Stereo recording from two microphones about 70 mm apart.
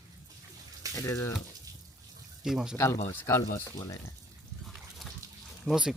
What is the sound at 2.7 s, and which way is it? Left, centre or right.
Speech, left.